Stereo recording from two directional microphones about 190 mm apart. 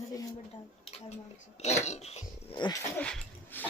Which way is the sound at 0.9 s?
30° left (ahead or behind).